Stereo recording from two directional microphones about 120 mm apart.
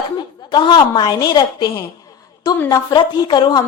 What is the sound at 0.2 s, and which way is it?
A woman's voice, 40° left (ahead or behind).